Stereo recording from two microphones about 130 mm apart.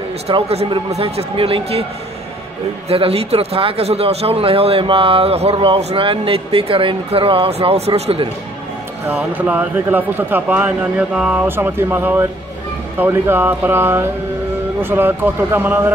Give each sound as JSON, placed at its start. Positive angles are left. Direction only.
{"t": 0.3, "sound": "a man's voice", "side_deg": -45}
{"t": 2.9, "sound": "a man's voice", "side_deg": -50}
{"t": 9.1, "sound": "speech", "side_deg": -10}